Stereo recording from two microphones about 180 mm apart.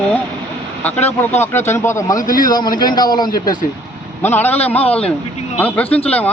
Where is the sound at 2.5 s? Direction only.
25° left (ahead or behind).